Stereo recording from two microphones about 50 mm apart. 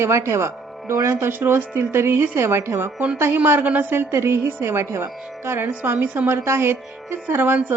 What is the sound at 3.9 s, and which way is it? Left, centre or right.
Speech, right.